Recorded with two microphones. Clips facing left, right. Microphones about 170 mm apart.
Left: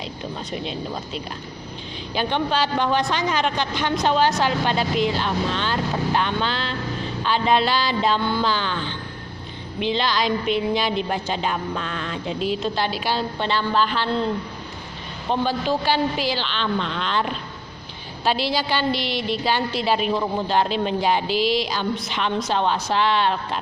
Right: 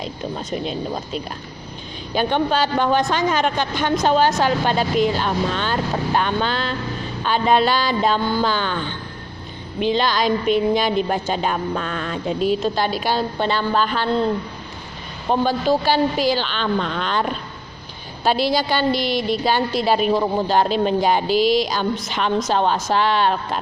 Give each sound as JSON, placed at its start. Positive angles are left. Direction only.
{"t": 0.0, "sound": "a woman's voice", "side_deg": -45}
{"t": 15.3, "sound": "a woman's voice", "side_deg": -45}